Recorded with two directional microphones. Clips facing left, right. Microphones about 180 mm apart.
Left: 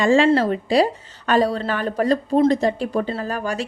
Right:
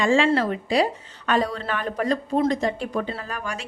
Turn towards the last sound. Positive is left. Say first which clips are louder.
# left 7 dB
turn(degrees=35)  # may be behind; listen again after turning